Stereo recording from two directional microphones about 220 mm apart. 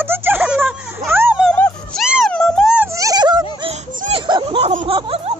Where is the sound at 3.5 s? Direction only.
25° right (ahead or behind).